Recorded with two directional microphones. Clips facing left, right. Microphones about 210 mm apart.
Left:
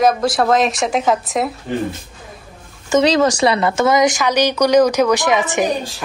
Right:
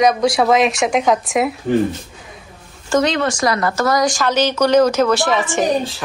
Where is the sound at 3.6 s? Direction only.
25° left (ahead or behind).